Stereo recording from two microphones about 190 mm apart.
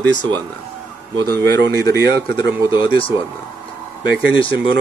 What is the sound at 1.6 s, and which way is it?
Speech, 60° right (ahead or behind).